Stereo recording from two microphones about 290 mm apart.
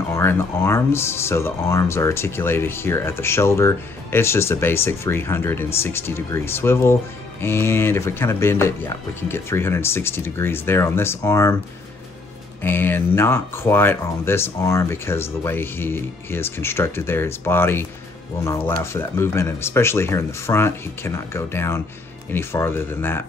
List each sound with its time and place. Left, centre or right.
0.1 s speech: centre
12.6 s speech: centre